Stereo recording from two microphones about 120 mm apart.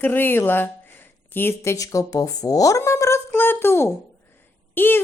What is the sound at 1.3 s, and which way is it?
A woman's voice, 20° left (ahead or behind).